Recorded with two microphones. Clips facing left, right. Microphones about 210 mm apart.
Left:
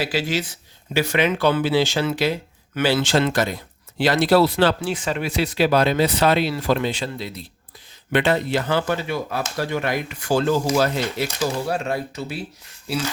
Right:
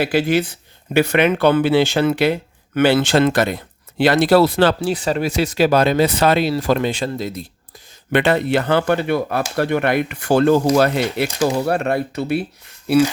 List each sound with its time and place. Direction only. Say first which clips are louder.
0.0 s speech: right 6 dB; 55° right (ahead or behind)
8.1 s speech: right 4 dB; 65° right (ahead or behind)